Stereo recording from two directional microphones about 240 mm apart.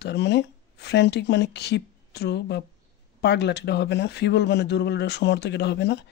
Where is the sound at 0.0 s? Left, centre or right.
Left.